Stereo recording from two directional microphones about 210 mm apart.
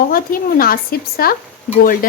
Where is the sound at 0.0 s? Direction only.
45° left (ahead or behind).